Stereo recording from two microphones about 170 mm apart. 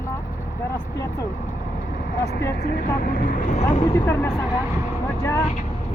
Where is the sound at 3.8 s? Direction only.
15° left (ahead or behind).